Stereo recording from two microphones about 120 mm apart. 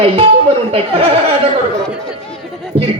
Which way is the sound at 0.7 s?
55° right (ahead or behind).